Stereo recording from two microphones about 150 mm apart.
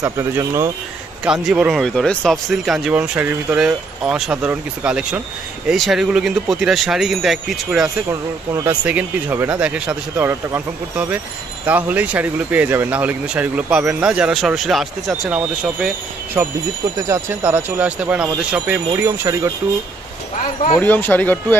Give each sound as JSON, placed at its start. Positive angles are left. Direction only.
{"t": 0.0, "sound": "speech", "side_deg": -20}
{"t": 1.2, "sound": "speech", "side_deg": -5}
{"t": 8.1, "sound": "speech", "side_deg": -15}
{"t": 19.2, "sound": "speech", "side_deg": -20}
{"t": 20.7, "sound": "speech", "side_deg": 10}